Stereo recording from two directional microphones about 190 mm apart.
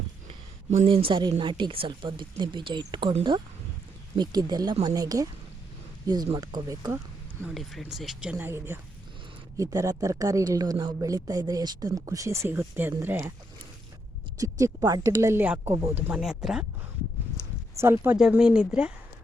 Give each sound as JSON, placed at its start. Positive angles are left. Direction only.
{"t": 0.3, "sound": "a woman's voice", "side_deg": -30}
{"t": 7.4, "sound": "speech", "side_deg": 0}
{"t": 14.3, "sound": "speech", "side_deg": -20}
{"t": 17.7, "sound": "speech", "side_deg": -15}